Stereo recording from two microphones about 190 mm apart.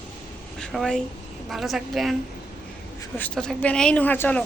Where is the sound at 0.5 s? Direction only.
5° left (ahead or behind).